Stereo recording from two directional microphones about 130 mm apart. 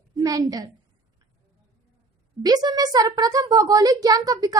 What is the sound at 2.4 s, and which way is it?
A child's voice, 30° right (ahead or behind).